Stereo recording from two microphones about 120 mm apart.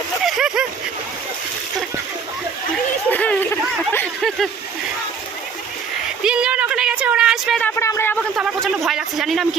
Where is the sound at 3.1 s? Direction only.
15° left (ahead or behind).